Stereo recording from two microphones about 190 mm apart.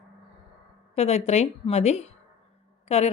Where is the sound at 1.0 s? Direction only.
35° left (ahead or behind).